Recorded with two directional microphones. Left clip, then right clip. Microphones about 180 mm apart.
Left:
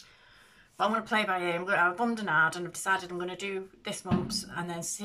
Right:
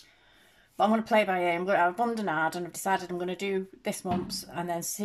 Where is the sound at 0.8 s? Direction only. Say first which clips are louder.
Right 4 dB; 30° right (ahead or behind).